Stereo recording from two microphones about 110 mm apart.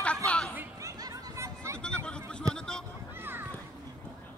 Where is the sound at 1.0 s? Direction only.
30° right (ahead or behind).